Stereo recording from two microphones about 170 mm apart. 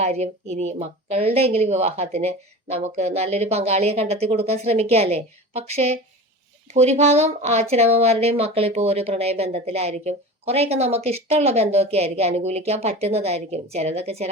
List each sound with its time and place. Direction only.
0.0 s speech: 40° right (ahead or behind)